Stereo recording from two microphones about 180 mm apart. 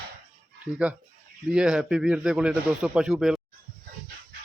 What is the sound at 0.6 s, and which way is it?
A man's voice, 5° right (ahead or behind).